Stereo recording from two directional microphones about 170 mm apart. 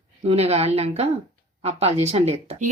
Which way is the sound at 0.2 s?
35° right (ahead or behind).